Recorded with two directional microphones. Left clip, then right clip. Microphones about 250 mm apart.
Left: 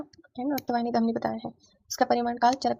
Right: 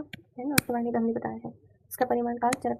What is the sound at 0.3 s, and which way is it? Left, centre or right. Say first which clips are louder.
Speech: even; left.